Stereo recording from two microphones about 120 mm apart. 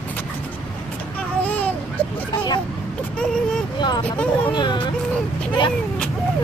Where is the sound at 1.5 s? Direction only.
15° left (ahead or behind).